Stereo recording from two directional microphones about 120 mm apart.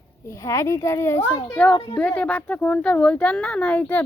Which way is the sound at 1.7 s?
45° left (ahead or behind).